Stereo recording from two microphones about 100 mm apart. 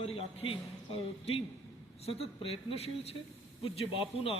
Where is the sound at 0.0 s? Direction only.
75° left (ahead or behind).